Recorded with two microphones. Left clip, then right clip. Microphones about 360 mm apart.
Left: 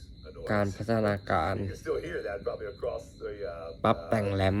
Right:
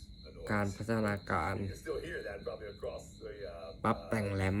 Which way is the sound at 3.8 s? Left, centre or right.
Centre.